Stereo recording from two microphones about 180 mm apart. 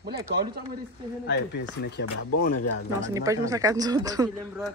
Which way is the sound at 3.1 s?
20° right (ahead or behind).